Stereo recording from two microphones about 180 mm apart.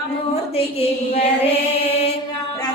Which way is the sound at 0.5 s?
35° left (ahead or behind).